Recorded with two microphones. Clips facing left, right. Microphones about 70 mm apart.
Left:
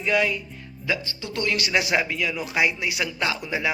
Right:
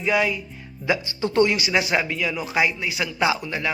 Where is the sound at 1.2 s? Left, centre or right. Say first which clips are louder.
Right 11 dB; right.